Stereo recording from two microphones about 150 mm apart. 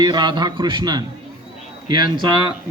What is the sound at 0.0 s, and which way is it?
A man's voice, 30° right (ahead or behind).